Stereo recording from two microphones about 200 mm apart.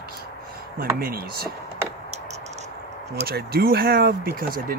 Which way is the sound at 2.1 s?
35° right (ahead or behind).